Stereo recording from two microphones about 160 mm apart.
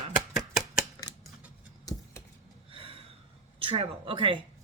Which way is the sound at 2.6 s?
35° right (ahead or behind).